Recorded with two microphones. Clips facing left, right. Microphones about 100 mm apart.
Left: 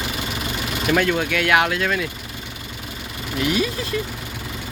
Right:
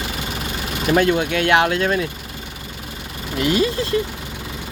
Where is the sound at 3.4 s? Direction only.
30° right (ahead or behind).